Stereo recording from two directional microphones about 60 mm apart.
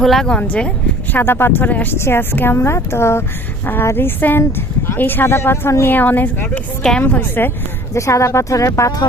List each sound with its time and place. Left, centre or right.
0.0 s speech: centre
0.3 s speech: centre
1.1 s speech: left
2.0 s speech: left
3.9 s speech: left
5.8 s speech: left
7.9 s speech: left